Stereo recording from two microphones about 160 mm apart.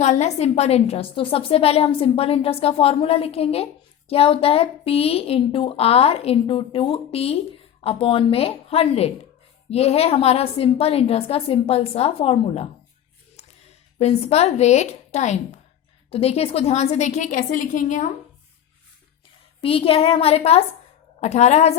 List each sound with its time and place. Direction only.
0.0 s a woman's voice: 45° left (ahead or behind)
14.0 s a woman's voice: 40° left (ahead or behind)
19.6 s a woman's voice: 35° left (ahead or behind)